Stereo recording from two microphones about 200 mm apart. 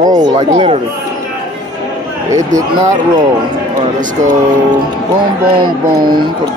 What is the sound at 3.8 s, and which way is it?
Speech, 40° right (ahead or behind).